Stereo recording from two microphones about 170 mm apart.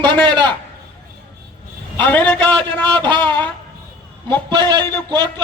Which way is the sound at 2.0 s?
10° left (ahead or behind).